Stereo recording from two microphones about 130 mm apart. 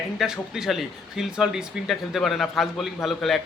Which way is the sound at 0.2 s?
5° right (ahead or behind).